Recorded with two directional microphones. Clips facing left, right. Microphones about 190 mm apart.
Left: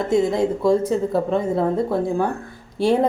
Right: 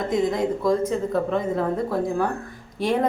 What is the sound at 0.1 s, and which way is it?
Speech, 30° left (ahead or behind).